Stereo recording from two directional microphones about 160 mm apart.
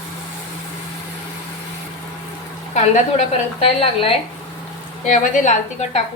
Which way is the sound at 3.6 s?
35° left (ahead or behind).